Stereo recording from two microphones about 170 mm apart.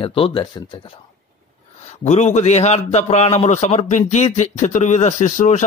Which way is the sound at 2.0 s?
45° left (ahead or behind).